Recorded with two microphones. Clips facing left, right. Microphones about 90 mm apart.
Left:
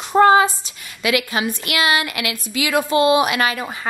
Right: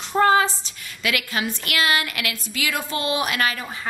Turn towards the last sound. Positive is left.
turn(degrees=15)  # may be behind; listen again after turning